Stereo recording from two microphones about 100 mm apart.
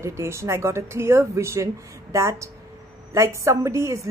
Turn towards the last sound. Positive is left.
turn(degrees=-30)  # may be behind; listen again after turning